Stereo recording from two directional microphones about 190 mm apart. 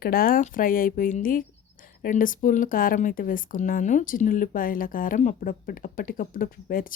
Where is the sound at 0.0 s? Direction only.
50° left (ahead or behind).